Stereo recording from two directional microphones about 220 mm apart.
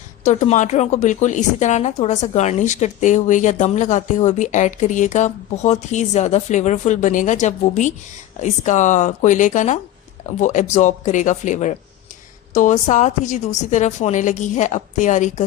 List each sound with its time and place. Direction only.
0.3 s speech: 35° left (ahead or behind)